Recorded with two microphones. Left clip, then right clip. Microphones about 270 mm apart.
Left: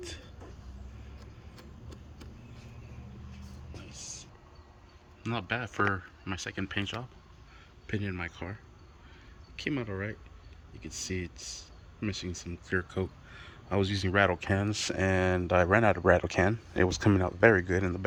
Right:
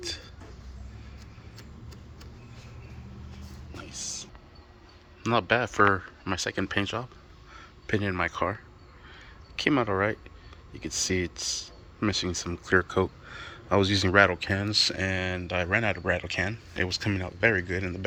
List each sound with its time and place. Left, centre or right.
3.8 s music: centre
5.2 s a man's voice: centre
9.6 s a man's voice: centre